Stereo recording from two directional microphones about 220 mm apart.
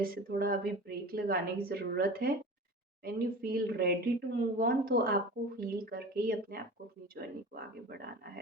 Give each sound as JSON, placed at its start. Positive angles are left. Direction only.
{"t": 0.0, "sound": "a woman's voice", "side_deg": -45}